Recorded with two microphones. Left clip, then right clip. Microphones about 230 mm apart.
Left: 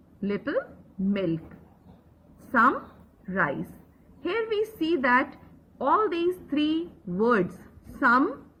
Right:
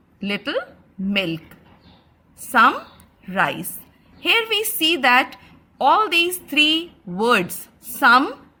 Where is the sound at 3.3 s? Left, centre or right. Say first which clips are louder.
Right 6 dB; right.